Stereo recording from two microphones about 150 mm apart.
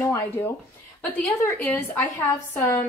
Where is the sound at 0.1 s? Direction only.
15° left (ahead or behind).